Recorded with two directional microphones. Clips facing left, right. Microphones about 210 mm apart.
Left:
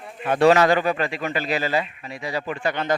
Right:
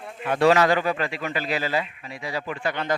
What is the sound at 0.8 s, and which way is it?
Speech, 40° left (ahead or behind).